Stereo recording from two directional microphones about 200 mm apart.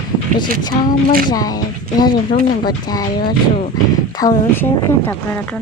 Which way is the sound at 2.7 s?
20° left (ahead or behind).